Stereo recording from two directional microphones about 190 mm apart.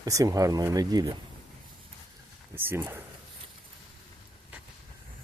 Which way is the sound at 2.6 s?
10° right (ahead or behind).